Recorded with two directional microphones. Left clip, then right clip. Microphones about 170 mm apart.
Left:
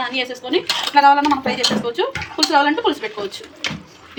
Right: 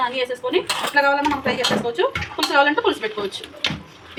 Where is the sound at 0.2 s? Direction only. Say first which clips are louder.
Even; 40° left (ahead or behind).